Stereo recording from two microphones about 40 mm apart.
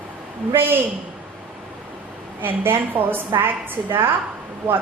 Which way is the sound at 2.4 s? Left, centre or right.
Right.